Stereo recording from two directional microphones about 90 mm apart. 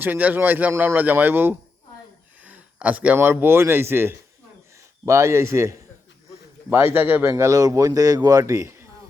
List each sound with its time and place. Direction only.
0.0 s speech: 20° right (ahead or behind)